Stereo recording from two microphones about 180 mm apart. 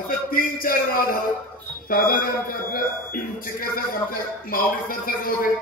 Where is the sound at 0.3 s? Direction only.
55° left (ahead or behind).